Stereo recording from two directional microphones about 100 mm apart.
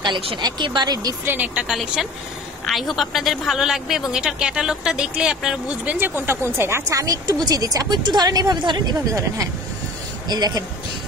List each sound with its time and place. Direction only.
0.0 s speech: 60° right (ahead or behind)
0.4 s speech: 50° right (ahead or behind)
1.2 s a woman's voice: 20° right (ahead or behind); by 9.2 s 40° right (ahead or behind)
10.2 s speech: 45° right (ahead or behind)